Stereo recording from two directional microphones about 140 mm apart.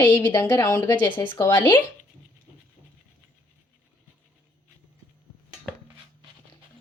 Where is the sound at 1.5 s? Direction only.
30° left (ahead or behind).